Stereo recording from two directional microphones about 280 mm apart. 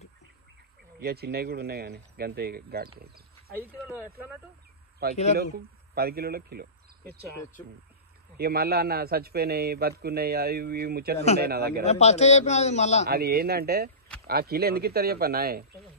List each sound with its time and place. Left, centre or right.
0.9 s a man's voice: right
3.0 s a sound: right
5.1 s a man's voice: left
5.9 s speech: right
8.4 s a man's voice: right
11.8 s a man's voice: left
13.1 s a man's voice: right